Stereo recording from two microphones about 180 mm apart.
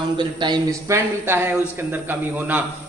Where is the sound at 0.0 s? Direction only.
25° right (ahead or behind).